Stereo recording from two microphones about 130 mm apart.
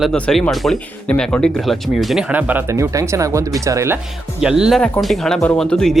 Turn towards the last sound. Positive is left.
turn(degrees=5)  # may be behind; listen again after turning